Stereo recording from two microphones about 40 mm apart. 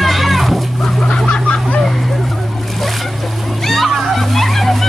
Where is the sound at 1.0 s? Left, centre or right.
Left.